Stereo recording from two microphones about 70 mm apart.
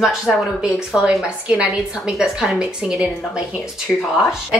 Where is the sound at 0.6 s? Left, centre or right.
Centre.